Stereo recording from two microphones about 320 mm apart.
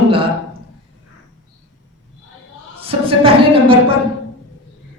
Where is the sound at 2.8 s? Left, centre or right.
Centre.